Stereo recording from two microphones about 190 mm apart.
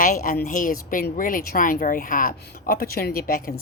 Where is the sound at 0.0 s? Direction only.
45° left (ahead or behind).